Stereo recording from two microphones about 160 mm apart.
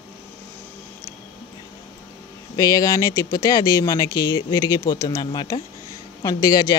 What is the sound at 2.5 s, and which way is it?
Speech, 20° left (ahead or behind).